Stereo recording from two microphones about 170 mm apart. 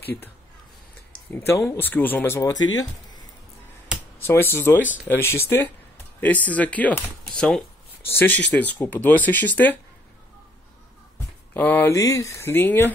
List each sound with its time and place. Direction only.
0.0 s speech: 15° left (ahead or behind)
1.3 s speech: 15° left (ahead or behind)
4.3 s speech: 15° left (ahead or behind)
11.5 s speech: 10° left (ahead or behind)